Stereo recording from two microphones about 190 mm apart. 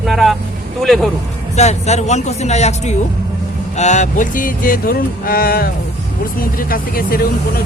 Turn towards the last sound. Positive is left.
turn(degrees=50)  # may be behind; listen again after turning